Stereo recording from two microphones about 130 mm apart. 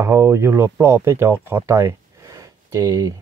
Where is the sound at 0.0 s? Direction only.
20° right (ahead or behind).